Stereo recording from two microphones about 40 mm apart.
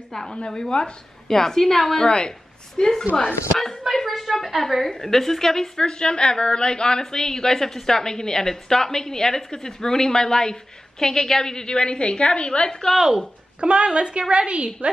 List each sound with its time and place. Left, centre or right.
0.1 s a woman's voice: centre
1.3 s a woman's voice: centre
2.0 s a woman's voice: left
13.6 s a woman's voice: right